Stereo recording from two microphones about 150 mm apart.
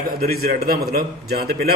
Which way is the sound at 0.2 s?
90° right.